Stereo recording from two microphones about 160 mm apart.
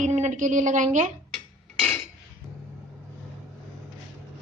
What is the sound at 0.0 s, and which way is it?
Speech, 50° right (ahead or behind).